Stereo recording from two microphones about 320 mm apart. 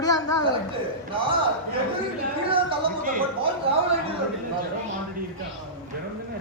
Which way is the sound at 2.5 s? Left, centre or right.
Right.